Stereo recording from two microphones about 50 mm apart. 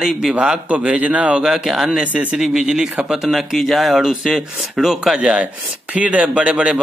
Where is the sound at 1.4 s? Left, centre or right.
Centre.